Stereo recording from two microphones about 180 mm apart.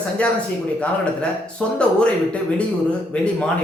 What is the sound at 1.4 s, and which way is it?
Speech, 5° left (ahead or behind).